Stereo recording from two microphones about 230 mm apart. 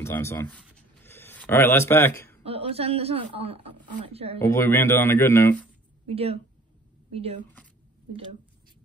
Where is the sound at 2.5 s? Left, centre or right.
Right.